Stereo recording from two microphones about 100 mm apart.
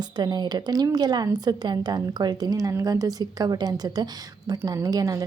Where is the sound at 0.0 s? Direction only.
45° right (ahead or behind).